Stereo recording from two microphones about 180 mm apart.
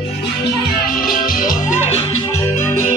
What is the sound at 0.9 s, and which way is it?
Music, 50° left (ahead or behind).